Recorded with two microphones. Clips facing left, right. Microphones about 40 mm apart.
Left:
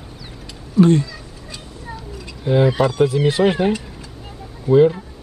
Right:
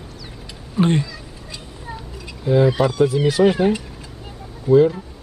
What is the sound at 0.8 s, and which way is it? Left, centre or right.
Speech, right.